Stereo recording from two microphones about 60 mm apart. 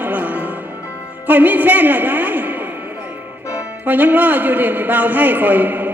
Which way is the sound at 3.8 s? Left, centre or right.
Right.